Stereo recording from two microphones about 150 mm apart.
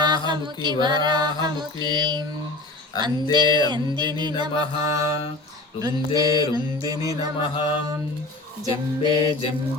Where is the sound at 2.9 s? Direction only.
25° left (ahead or behind).